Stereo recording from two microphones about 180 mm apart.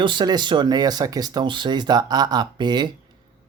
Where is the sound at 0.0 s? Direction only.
25° right (ahead or behind).